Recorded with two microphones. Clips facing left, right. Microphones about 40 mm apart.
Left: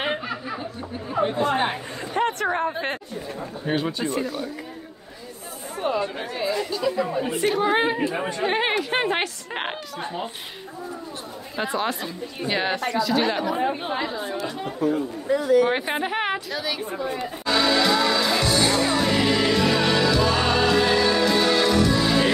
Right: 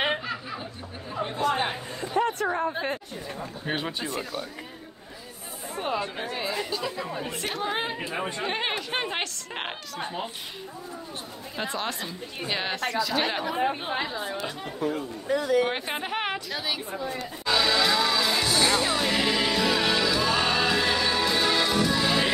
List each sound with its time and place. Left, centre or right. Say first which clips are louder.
1.1 s speech: left 4 dB; left
2.0 s a sound: left 1 dB; left
2.5 s a woman's voice: left 3 dB; left
3.6 s speech: left 6 dB; centre
5.8 s speech: left 4 dB; centre
6.3 s speech: left 6 dB; centre
7.0 s speech: left 8 dB; centre
9.9 s speech: right 1 dB; centre
11.5 s speech: left 5 dB; centre
15.6 s speech: left 6 dB; centre
16.5 s speech: left 3 dB; centre
17.5 s music: left 3 dB; centre